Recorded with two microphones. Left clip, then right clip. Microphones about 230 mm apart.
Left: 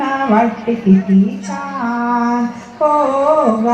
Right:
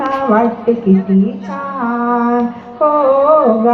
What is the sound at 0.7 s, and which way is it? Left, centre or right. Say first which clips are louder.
Speech: right 5 dB; left.